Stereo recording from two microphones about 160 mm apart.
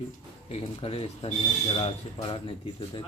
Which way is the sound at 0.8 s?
35° left (ahead or behind).